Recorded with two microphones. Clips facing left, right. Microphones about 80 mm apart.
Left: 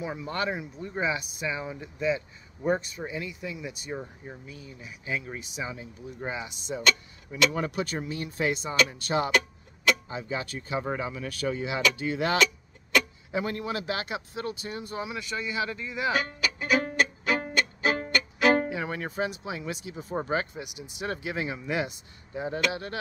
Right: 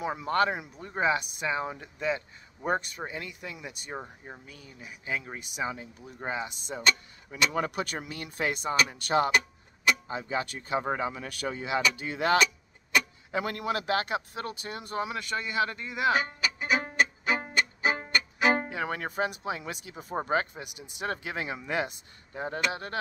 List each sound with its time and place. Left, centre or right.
0.2 s speech: right
3.9 s speech: right
4.5 s speech: right
5.4 s speech: right
16.1 s music: right
18.7 s speech: right
20.2 s speech: right